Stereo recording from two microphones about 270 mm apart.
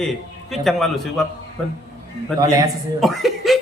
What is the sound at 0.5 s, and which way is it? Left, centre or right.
Speech, centre.